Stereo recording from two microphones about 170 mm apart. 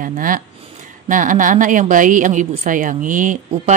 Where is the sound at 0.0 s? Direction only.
55° right (ahead or behind).